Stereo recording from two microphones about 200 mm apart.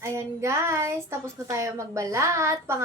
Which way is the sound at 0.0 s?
15° right (ahead or behind).